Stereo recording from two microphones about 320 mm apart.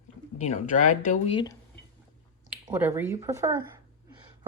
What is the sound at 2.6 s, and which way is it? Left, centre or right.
Speech, centre.